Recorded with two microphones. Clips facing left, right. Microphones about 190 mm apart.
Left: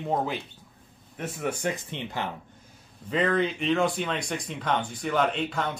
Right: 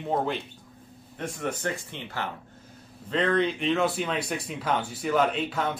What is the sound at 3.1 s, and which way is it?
Speech, 5° left (ahead or behind).